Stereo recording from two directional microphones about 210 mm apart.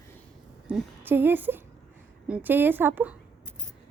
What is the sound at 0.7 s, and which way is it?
A woman's voice, 5° right (ahead or behind).